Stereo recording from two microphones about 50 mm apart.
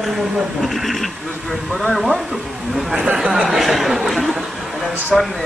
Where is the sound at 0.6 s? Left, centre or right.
Centre.